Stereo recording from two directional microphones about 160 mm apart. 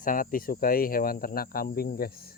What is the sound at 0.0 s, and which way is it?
Speech, 60° left (ahead or behind).